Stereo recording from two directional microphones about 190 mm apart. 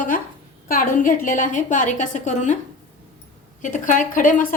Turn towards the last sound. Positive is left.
turn(degrees=45)  # may be behind; listen again after turning